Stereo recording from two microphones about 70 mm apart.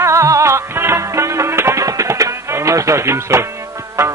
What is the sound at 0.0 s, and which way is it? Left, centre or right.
Music, right.